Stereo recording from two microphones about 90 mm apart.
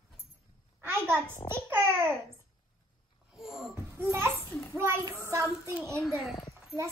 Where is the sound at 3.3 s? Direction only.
5° right (ahead or behind).